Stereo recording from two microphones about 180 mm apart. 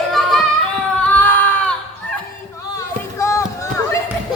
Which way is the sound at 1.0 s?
10° left (ahead or behind).